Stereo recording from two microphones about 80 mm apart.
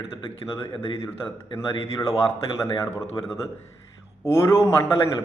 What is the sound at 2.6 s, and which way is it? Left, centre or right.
Speech, left.